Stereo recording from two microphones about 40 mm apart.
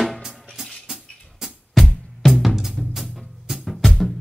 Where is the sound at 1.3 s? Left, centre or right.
Centre.